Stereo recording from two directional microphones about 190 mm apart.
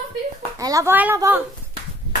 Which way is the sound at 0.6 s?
20° right (ahead or behind).